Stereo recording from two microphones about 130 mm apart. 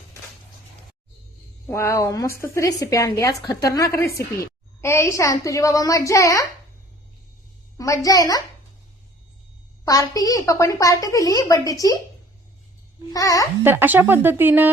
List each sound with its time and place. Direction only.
1.6 s speech: 20° left (ahead or behind)
7.8 s speech: 25° left (ahead or behind)
9.8 s speech: 25° left (ahead or behind)
13.1 s speech: 25° left (ahead or behind)
13.7 s speech: 15° right (ahead or behind)